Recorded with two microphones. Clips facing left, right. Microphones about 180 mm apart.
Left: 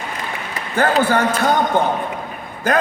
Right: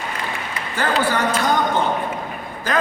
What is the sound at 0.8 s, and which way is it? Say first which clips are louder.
Speech: left 5 dB; 45° left (ahead or behind).